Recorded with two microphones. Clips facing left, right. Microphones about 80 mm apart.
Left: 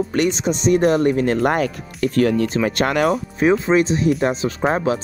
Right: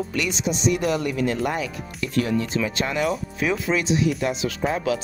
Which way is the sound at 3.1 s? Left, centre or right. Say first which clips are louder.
Left 7 dB; left.